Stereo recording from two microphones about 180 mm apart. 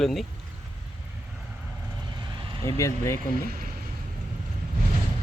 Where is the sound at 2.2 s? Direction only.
25° right (ahead or behind).